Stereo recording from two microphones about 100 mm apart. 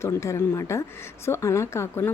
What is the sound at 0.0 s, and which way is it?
Speech, 25° left (ahead or behind).